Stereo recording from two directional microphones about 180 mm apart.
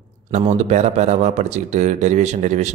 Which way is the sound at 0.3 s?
35° right (ahead or behind).